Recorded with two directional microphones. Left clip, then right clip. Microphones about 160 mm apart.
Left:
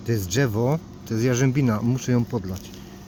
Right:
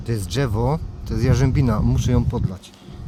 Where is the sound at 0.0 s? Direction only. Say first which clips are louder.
Left 1 dB; 70° right (ahead or behind).